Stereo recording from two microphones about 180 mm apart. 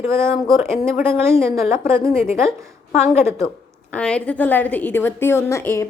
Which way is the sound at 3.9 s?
5° left (ahead or behind).